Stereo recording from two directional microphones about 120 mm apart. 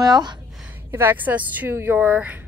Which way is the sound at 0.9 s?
15° right (ahead or behind).